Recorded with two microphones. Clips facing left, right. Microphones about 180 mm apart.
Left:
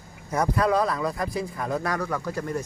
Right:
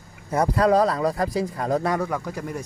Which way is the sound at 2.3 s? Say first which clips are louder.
Left 2 dB; 10° right (ahead or behind).